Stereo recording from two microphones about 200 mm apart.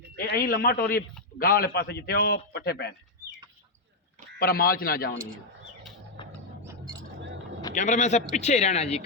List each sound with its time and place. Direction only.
0.2 s a man's voice: 45° left (ahead or behind)
4.4 s a man's voice: 50° left (ahead or behind)
6.2 s a sound: 25° left (ahead or behind)
7.7 s speech: 40° left (ahead or behind)